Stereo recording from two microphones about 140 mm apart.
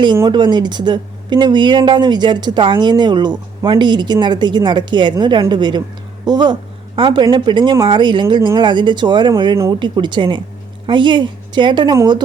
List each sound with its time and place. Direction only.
0.3 s speech: 30° right (ahead or behind)